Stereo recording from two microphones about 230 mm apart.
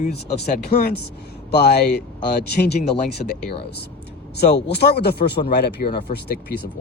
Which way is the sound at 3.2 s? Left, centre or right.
Left.